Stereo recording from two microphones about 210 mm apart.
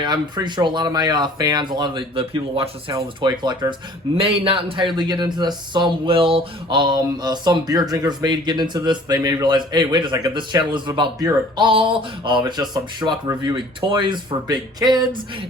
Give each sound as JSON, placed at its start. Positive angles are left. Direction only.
{"t": 0.0, "sound": "speech", "side_deg": -20}